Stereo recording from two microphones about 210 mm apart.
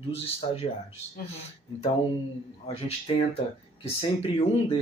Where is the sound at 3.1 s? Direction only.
25° left (ahead or behind).